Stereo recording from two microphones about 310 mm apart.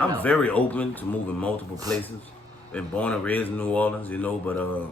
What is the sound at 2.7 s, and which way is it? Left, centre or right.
A man's voice, centre.